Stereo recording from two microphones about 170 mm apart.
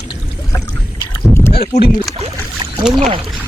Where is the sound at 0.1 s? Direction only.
20° left (ahead or behind).